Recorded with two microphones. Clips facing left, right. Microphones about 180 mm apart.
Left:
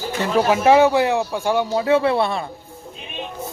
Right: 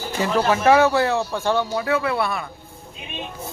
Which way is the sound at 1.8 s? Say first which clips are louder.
Left 5 dB; 25° left (ahead or behind).